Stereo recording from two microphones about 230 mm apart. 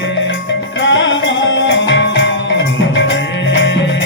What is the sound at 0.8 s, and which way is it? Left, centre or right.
Music, left.